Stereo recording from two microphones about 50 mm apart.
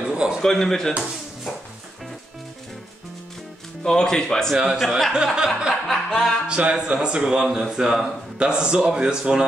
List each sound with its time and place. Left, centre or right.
0.0 s a sound: centre
0.4 s speech: centre
3.8 s speech: centre
4.7 s music: centre
5.1 s speech: centre
5.7 s music: centre
6.4 s speech: right